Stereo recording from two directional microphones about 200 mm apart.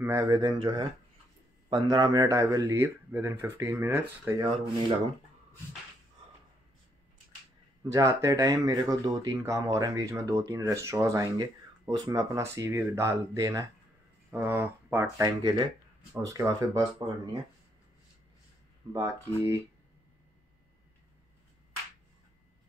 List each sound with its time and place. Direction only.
0.0 s speech: 15° right (ahead or behind)
7.9 s speech: 15° right (ahead or behind)
18.9 s speech: 15° right (ahead or behind)